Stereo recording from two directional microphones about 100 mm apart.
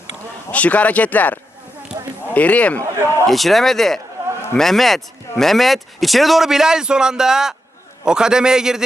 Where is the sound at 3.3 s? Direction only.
Centre (ahead or behind).